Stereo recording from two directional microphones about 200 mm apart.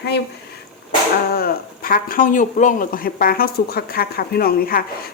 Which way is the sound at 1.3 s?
50° left (ahead or behind).